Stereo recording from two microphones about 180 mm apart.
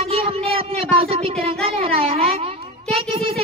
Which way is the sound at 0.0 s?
35° right (ahead or behind).